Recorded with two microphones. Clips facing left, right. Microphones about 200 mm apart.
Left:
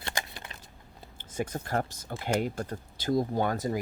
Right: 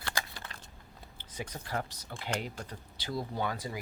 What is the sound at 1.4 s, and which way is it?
Speech, 50° left (ahead or behind).